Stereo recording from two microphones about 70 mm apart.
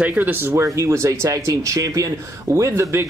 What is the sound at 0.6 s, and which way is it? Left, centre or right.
Speech, right.